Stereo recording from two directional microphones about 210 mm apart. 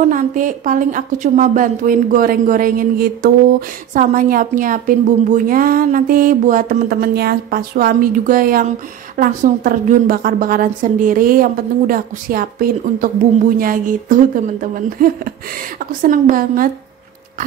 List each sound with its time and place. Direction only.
0.1 s a woman's voice: 40° right (ahead or behind)